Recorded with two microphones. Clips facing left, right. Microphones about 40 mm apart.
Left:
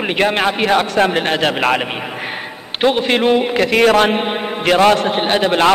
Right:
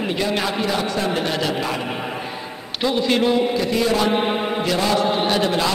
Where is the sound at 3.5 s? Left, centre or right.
Left.